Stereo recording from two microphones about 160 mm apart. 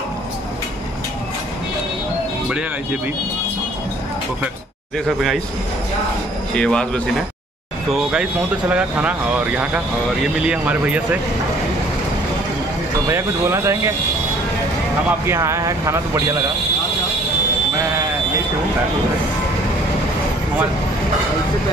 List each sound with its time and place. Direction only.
4.9 s speech: centre (ahead or behind)
6.5 s speech: 5° left (ahead or behind)
8.1 s speech: 5° right (ahead or behind)
13.1 s speech: 20° right (ahead or behind)
15.0 s speech: 15° right (ahead or behind)